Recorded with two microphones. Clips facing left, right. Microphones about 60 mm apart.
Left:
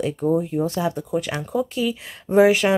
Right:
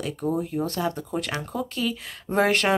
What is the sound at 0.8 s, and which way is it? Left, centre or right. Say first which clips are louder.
Speech: left 4 dB; centre.